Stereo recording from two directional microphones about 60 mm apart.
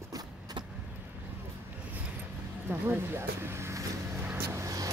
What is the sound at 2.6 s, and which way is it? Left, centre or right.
Speech, right.